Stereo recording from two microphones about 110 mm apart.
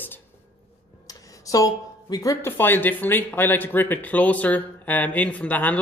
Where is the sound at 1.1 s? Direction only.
30° left (ahead or behind); by 5.8 s 15° left (ahead or behind).